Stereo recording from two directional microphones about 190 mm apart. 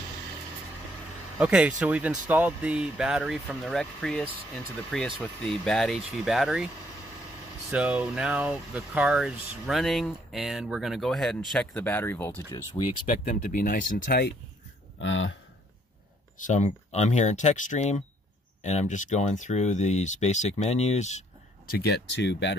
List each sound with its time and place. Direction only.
1.4 s speech: 5° right (ahead or behind)
7.7 s speech: 5° right (ahead or behind); by 12.5 s 10° left (ahead or behind)
12.7 s speech: 30° left (ahead or behind)
13.4 s speech: 50° left (ahead or behind)
15.0 s speech: 80° left
16.3 s speech: 40° left (ahead or behind)
21.6 s speech: 55° left (ahead or behind)